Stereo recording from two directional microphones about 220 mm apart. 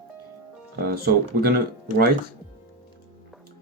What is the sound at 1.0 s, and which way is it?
Speech, 45° right (ahead or behind).